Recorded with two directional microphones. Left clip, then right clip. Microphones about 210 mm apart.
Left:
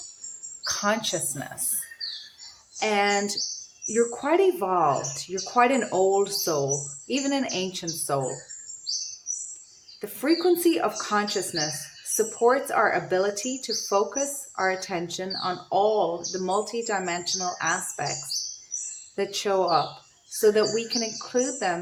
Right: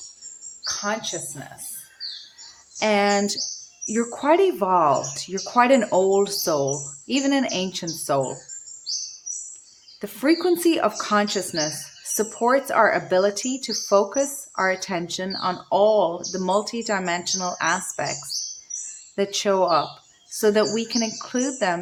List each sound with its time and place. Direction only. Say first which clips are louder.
0.6 s speech: left 1 dB; 15° left (ahead or behind)
2.7 s speech: right 3 dB; 30° right (ahead or behind)
10.0 s speech: right 3 dB; 30° right (ahead or behind)